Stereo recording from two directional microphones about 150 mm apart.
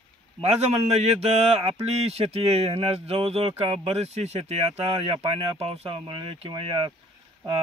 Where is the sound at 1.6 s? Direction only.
45° right (ahead or behind).